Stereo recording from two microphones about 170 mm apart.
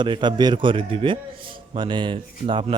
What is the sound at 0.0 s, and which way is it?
Speech, 25° right (ahead or behind).